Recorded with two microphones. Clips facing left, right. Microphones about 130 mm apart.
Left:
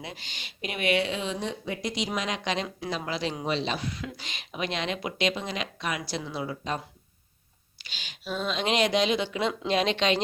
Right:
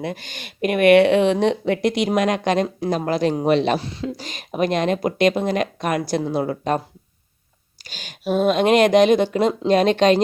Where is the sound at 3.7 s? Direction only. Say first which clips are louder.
Right 9 dB; 30° right (ahead or behind); by 6.8 s 55° right (ahead or behind).